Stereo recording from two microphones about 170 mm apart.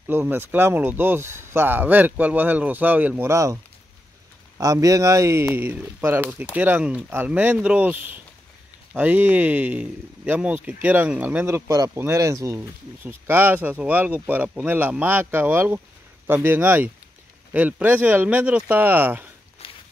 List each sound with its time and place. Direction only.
0.1 s speech: 10° right (ahead or behind)
4.6 s speech: 20° right (ahead or behind)
19.6 s a sound: 35° left (ahead or behind)